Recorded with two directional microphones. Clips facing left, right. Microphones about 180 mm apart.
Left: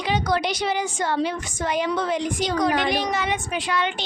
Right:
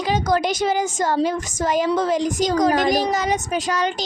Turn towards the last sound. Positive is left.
turn(degrees=-40)  # may be behind; listen again after turning